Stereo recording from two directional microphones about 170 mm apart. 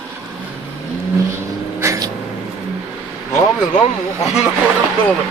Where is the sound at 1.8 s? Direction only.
20° right (ahead or behind).